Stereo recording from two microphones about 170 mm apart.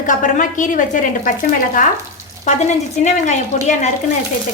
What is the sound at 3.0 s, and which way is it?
Speech, 45° left (ahead or behind).